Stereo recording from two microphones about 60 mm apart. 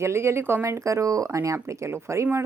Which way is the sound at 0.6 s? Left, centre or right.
Right.